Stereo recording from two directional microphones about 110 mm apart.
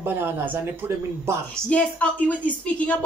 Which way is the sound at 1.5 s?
10° left (ahead or behind).